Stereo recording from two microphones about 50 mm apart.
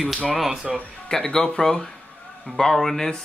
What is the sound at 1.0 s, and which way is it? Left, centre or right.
Speech, centre.